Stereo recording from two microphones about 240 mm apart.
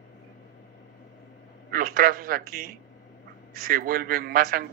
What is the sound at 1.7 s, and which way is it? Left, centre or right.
A man's voice, right.